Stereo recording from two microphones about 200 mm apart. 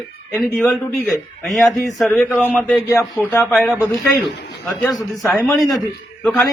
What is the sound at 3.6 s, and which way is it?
Speech, 5° right (ahead or behind).